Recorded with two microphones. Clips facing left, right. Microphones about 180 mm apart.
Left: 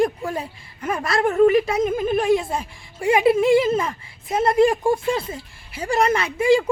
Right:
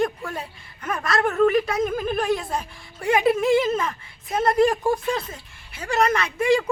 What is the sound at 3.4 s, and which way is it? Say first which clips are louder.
Speech: left 3 dB; 30° left (ahead or behind).